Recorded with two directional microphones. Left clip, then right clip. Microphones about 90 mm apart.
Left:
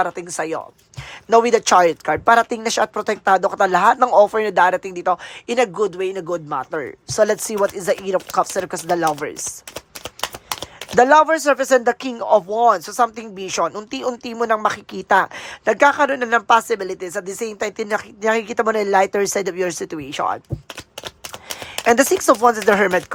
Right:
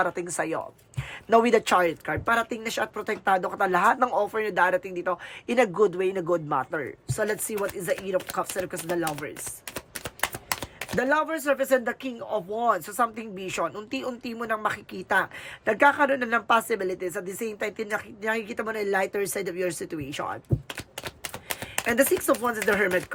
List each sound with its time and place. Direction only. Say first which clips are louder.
0.2 s speech: left 4 dB; 30° left (ahead or behind); by 3.2 s 55° left (ahead or behind)
3.2 s speech: left 8 dB; 40° left (ahead or behind)
4.1 s speech: left 12 dB; 50° left (ahead or behind)
5.6 s speech: left 3 dB; 20° left (ahead or behind)
6.7 s speech: left 6 dB; 30° left (ahead or behind)
7.5 s speech: left 9 dB; 45° left (ahead or behind)
10.2 s a sound: left 3 dB; 55° left (ahead or behind)
12.2 s speech: left 15 dB; 75° left (ahead or behind)
12.5 s speech: left 9 dB; 40° left (ahead or behind)
14.1 s speech: left 12 dB; 50° left (ahead or behind)
21.5 s speech: left 10 dB; 50° left (ahead or behind)